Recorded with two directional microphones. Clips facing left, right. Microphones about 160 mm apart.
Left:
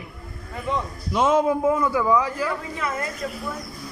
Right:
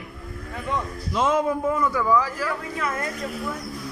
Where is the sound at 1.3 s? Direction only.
25° left (ahead or behind).